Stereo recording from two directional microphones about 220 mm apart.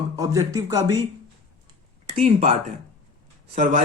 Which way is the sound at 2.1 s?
30° right (ahead or behind).